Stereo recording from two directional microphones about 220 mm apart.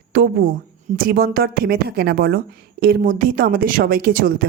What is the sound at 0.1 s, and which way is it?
Speech, 40° right (ahead or behind).